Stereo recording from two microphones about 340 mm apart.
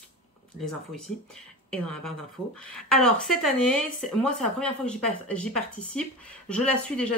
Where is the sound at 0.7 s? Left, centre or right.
Centre.